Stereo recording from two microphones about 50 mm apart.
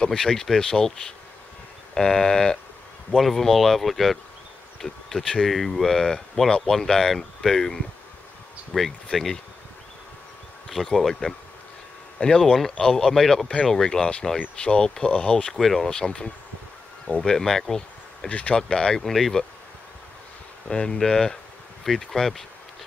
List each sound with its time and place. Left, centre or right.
0.0 s speech: centre
8.7 s speech: centre
10.7 s speech: centre
14.6 s speech: centre
15.5 s speech: centre
15.9 s speech: centre
18.3 s speech: left
18.7 s speech: centre
19.0 s speech: centre
20.6 s speech: centre